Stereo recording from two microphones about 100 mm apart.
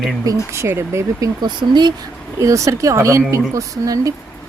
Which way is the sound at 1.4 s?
50° right (ahead or behind).